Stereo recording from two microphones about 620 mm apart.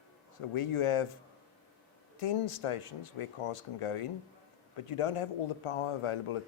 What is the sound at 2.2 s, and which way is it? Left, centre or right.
Speech, left.